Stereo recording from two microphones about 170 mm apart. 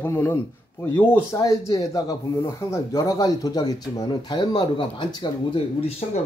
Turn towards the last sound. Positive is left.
turn(degrees=35)  # may be behind; listen again after turning